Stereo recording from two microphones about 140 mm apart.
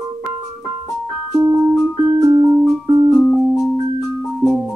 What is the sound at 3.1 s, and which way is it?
Keyboard, centre (ahead or behind).